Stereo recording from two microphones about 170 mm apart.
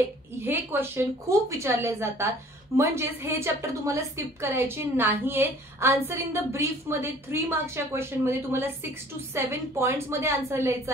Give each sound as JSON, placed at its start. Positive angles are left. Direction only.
{"t": 0.4, "sound": "a woman's voice", "side_deg": -15}